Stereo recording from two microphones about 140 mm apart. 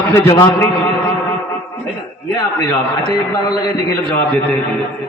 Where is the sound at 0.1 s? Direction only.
20° left (ahead or behind).